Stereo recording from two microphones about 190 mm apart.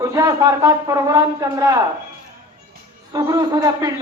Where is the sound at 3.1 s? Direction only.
20° right (ahead or behind).